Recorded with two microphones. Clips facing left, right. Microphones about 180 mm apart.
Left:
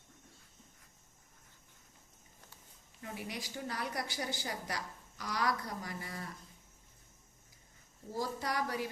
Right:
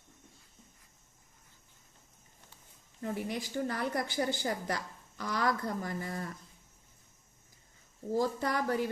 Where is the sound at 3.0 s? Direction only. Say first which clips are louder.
Right 7 dB; 50° right (ahead or behind).